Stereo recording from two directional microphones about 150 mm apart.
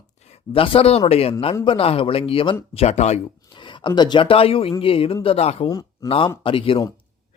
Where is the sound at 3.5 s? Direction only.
30° left (ahead or behind).